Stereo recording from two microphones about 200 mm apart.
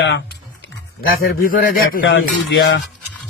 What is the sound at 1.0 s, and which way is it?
Speech, 45° left (ahead or behind).